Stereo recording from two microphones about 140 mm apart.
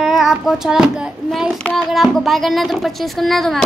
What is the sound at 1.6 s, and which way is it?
Speech, centre (ahead or behind).